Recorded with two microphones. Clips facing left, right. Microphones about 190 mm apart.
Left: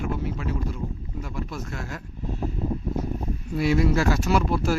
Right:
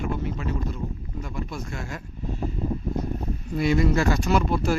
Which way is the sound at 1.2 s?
Centre (ahead or behind).